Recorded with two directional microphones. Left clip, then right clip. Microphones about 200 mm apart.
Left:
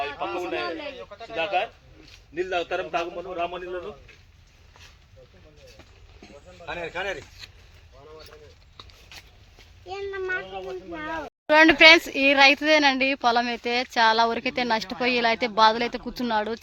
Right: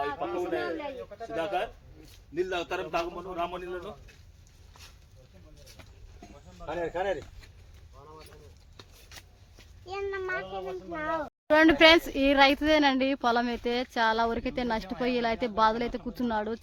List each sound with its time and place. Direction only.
0.0 s a sound: 50° right (ahead or behind)
0.9 s a child's voice: 45° right (ahead or behind)
6.7 s a child's voice: 45° right (ahead or behind)
9.9 s a child's voice: 55° right (ahead or behind)
11.4 s speech: 10° right (ahead or behind)